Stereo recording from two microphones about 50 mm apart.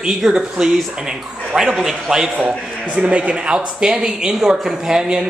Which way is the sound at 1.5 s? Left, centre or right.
Centre.